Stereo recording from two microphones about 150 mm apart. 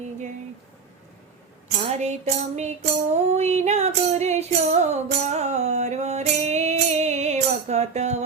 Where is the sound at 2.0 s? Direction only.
50° right (ahead or behind).